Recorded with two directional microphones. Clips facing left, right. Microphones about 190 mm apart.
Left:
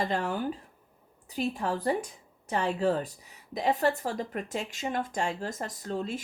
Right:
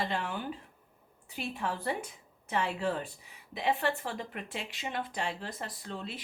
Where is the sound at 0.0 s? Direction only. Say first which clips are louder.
Left 5 dB; 40° left (ahead or behind).